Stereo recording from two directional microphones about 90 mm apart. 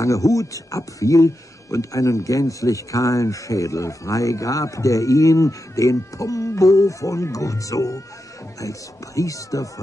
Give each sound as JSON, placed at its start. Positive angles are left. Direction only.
{"t": 0.0, "sound": "speech", "side_deg": 35}